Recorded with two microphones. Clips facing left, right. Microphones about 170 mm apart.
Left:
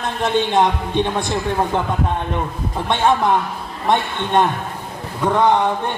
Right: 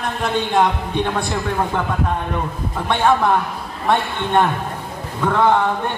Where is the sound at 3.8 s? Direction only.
20° left (ahead or behind).